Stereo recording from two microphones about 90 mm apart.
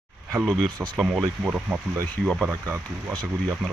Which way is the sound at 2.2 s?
5° right (ahead or behind).